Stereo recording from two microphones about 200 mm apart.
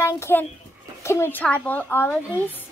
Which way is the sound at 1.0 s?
10° left (ahead or behind).